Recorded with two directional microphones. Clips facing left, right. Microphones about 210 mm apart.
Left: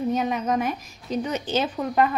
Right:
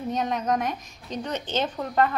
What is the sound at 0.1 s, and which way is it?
A woman's voice, 5° left (ahead or behind).